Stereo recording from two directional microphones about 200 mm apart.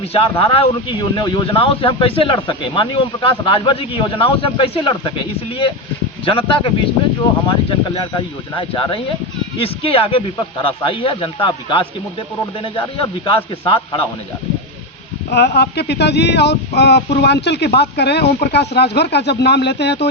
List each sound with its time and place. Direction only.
0.1 s speech: 30° left (ahead or behind)
8.1 s speech: 25° left (ahead or behind)
15.3 s speech: 55° left (ahead or behind)